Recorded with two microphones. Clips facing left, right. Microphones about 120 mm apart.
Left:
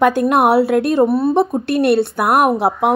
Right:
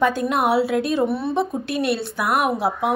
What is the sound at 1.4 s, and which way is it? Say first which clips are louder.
A woman's voice: left 7 dB; 60° left (ahead or behind).